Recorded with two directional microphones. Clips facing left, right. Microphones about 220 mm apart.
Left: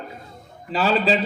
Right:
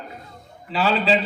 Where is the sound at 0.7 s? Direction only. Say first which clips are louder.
Even; 40° left (ahead or behind).